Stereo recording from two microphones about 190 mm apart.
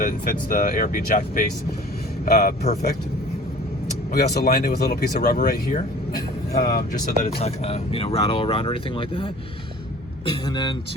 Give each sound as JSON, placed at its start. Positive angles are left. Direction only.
{"t": 0.0, "sound": "speech", "side_deg": 45}
{"t": 4.1, "sound": "speech", "side_deg": 55}
{"t": 7.3, "sound": "speech", "side_deg": 35}